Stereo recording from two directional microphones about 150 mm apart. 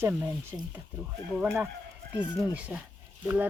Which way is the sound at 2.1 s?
10° right (ahead or behind).